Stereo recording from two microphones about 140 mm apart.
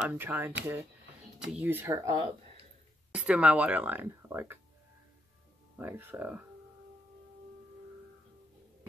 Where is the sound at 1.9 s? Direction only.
25° right (ahead or behind).